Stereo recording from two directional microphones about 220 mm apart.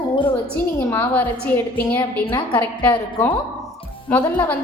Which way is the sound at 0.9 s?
5° left (ahead or behind).